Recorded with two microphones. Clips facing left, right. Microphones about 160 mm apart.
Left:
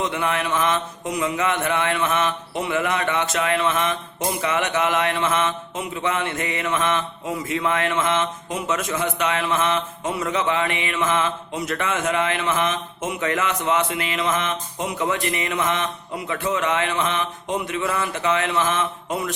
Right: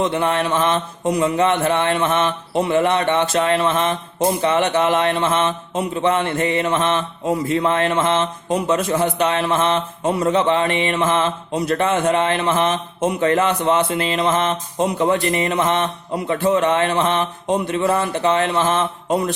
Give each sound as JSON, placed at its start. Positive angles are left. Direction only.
{"t": 0.0, "sound": "mantra", "side_deg": -30}